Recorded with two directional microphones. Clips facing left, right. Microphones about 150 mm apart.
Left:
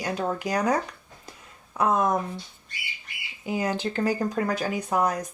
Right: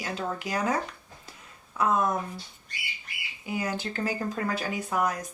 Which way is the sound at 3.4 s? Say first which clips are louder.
Left 4 dB; 20° left (ahead or behind).